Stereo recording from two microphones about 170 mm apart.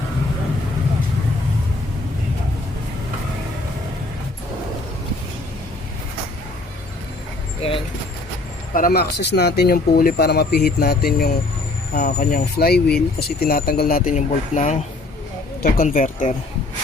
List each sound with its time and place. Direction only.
7.6 s keys jangling: 35° left (ahead or behind)
8.7 s speech: 60° left (ahead or behind)